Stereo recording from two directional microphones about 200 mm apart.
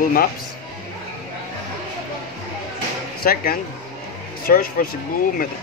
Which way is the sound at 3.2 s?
50° left (ahead or behind).